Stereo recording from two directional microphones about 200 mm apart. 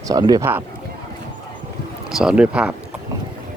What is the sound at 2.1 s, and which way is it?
Speech, 5° right (ahead or behind).